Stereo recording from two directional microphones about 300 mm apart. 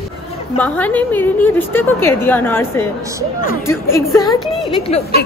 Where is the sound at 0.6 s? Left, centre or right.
Centre.